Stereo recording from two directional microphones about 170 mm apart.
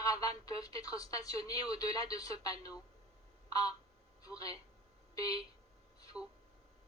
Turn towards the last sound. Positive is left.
turn(degrees=-5)  # may be behind; listen again after turning